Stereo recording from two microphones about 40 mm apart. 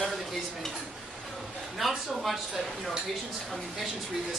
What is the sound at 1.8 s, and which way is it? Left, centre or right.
Speech, centre.